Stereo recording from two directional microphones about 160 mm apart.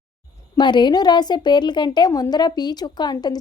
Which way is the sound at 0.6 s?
30° left (ahead or behind).